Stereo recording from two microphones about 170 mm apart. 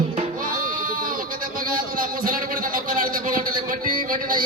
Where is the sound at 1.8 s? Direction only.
55° right (ahead or behind).